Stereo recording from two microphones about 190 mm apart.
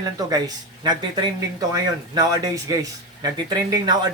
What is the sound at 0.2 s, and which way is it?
Speech, 20° right (ahead or behind).